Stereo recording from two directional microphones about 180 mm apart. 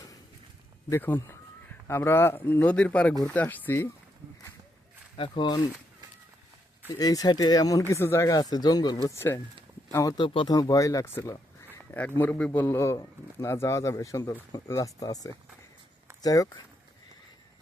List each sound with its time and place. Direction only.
0.9 s a man's voice: 10° left (ahead or behind)
5.1 s speech: 30° left (ahead or behind)
7.0 s a man's voice: 20° left (ahead or behind)